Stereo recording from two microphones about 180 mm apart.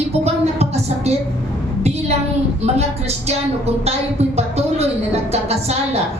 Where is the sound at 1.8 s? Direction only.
35° right (ahead or behind).